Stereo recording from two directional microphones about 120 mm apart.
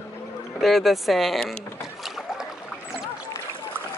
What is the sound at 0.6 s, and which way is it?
Speech, centre (ahead or behind).